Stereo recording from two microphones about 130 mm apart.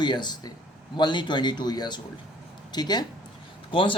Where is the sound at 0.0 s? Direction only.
35° left (ahead or behind).